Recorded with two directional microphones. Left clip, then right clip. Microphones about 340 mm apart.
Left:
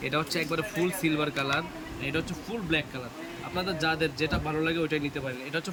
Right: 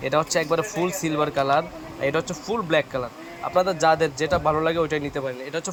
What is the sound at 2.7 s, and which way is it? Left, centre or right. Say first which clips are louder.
Speech: right 7 dB; right.